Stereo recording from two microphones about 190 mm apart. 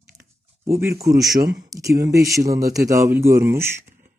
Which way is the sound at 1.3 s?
50° right (ahead or behind).